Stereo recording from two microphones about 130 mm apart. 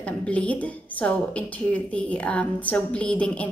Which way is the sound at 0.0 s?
10° left (ahead or behind).